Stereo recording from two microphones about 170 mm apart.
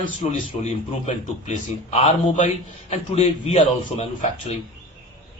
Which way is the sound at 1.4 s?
40° left (ahead or behind).